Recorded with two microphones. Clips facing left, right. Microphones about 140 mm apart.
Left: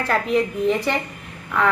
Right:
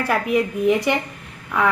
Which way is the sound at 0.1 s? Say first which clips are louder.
Even; 10° right (ahead or behind).